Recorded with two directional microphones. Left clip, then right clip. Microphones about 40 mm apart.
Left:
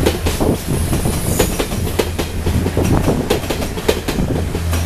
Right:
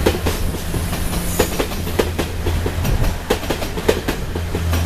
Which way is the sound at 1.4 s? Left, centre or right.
Left.